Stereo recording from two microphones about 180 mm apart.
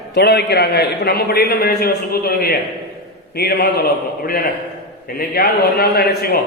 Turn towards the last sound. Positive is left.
turn(degrees=60)  # may be behind; listen again after turning